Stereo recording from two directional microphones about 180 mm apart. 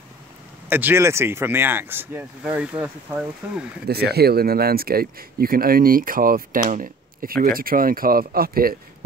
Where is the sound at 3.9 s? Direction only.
60° right (ahead or behind).